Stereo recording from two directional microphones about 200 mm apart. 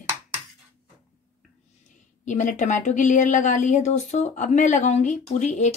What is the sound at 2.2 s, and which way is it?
Speech, 40° left (ahead or behind).